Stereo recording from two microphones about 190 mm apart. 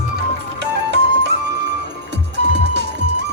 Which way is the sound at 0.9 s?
65° right (ahead or behind).